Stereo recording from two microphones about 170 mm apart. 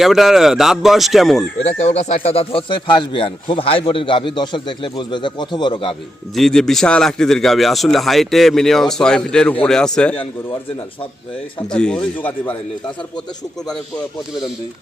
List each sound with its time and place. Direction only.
0.0 s a man's voice: centre (ahead or behind)
1.8 s speech: 40° left (ahead or behind)
6.3 s a man's voice: 5° left (ahead or behind)
11.7 s a man's voice: 5° left (ahead or behind)